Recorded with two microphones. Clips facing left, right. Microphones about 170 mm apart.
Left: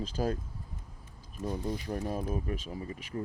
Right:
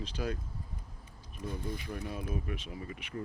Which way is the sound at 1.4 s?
45° left (ahead or behind).